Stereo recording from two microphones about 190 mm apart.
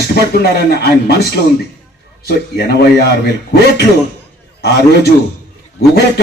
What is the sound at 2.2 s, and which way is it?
Speech, 55° left (ahead or behind).